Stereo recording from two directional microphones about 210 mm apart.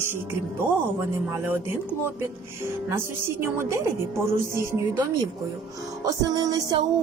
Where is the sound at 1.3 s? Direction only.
10° right (ahead or behind).